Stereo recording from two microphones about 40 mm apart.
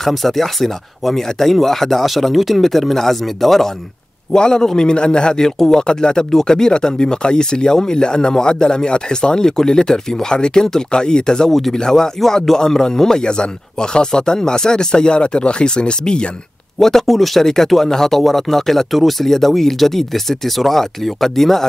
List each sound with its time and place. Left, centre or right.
0.0 s speech: centre
4.3 s a man's voice: centre
16.8 s speech: centre